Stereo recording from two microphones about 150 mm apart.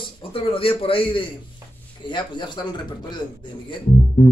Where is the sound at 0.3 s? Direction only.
40° left (ahead or behind).